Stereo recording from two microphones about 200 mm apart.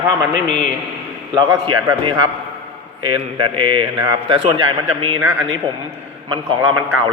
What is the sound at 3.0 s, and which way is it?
A man's voice, 25° right (ahead or behind).